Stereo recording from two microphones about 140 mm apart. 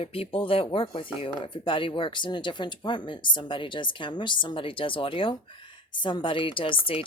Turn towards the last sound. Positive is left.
turn(degrees=40)  # may be behind; listen again after turning